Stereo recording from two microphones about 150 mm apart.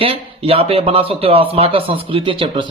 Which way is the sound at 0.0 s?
40° right (ahead or behind).